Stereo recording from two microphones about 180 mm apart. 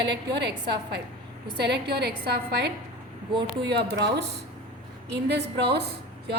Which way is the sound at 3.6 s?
70° right (ahead or behind).